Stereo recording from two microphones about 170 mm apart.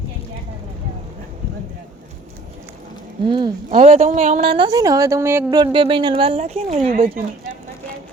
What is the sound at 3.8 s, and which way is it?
Speech, 40° right (ahead or behind).